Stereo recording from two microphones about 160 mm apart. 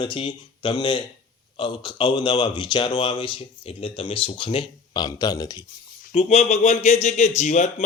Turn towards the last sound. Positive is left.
turn(degrees=45)  # may be behind; listen again after turning